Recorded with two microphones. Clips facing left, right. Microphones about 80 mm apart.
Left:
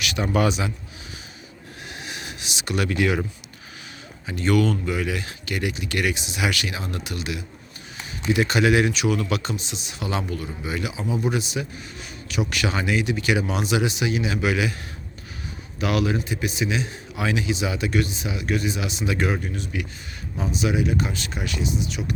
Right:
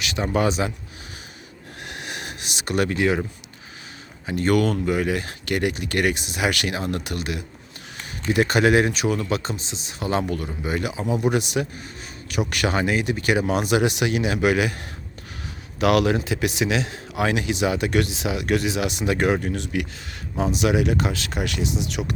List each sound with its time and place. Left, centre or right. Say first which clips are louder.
0.0 s speech: even; right
1.8 s a sound: right 2 dB; right
4.3 s speech: right 1 dB; right
11.2 s speech: right 4 dB; right
15.8 s speech: right 5 dB; right
16.2 s speech: right 3 dB; right
17.2 s speech: right 2 dB; right